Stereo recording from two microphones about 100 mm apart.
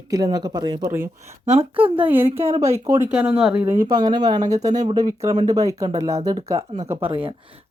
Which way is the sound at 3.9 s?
45° right (ahead or behind).